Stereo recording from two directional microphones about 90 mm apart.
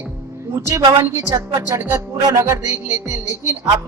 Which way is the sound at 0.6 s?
35° right (ahead or behind).